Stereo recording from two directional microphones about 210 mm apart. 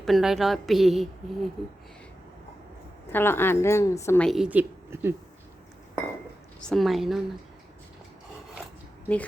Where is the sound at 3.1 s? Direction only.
10° left (ahead or behind).